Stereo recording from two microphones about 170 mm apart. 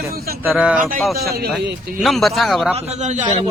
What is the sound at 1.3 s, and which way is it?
Speech, 65° right (ahead or behind).